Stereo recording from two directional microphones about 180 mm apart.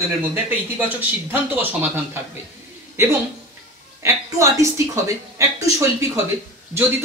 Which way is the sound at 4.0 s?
15° right (ahead or behind).